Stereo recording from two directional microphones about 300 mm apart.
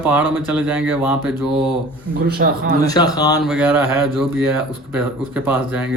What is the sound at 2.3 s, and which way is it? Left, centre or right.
Speech, right.